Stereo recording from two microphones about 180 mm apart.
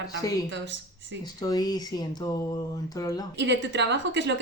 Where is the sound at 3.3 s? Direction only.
75° right (ahead or behind).